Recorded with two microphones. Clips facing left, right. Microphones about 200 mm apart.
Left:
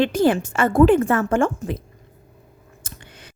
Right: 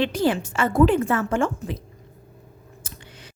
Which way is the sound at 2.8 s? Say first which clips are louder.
Left 2 dB; 55° left (ahead or behind).